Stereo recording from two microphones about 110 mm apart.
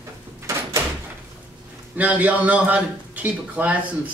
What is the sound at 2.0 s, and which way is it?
A man's voice, 15° right (ahead or behind).